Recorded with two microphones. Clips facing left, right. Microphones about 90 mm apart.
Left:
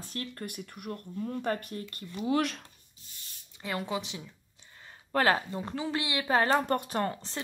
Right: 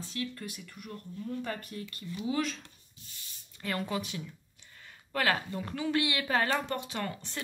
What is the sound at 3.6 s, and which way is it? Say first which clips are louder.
Speech: even; 20° left (ahead or behind).